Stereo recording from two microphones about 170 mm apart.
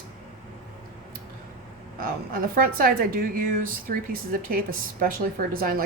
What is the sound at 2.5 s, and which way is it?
Speech, 55° right (ahead or behind).